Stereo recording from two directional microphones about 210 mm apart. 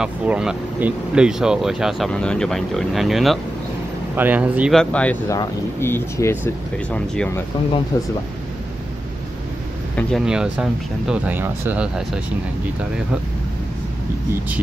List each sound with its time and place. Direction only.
0.0 s speech: 5° right (ahead or behind); by 8.1 s 15° left (ahead or behind)
9.9 s speech: centre (ahead or behind)